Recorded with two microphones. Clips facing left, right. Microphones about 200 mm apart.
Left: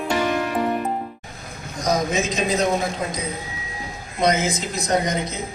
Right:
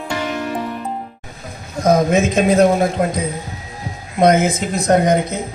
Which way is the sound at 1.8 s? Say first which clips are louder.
Right 8 dB; 55° right (ahead or behind).